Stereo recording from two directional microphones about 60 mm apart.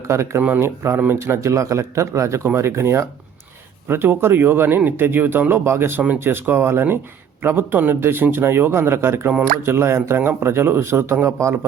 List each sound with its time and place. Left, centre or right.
0.1 s speech: right
0.9 s a man's voice: right
1.4 s a man's voice: right
3.8 s a man's voice: right